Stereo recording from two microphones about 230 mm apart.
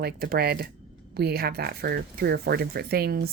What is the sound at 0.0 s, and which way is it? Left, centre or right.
A woman's voice, right.